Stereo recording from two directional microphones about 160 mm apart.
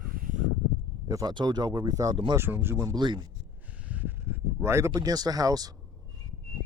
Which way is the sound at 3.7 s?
10° right (ahead or behind).